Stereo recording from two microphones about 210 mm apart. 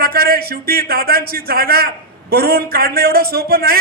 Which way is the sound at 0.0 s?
45° right (ahead or behind).